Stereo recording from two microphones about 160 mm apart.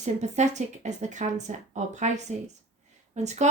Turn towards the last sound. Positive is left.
turn(degrees=-45)  # may be behind; listen again after turning